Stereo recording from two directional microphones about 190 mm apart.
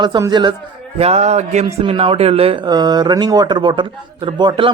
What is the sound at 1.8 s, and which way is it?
Speech, 25° right (ahead or behind).